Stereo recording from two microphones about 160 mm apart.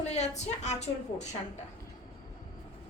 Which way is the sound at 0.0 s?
45° left (ahead or behind).